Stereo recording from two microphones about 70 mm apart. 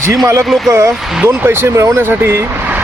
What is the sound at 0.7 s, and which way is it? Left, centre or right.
Speech, right.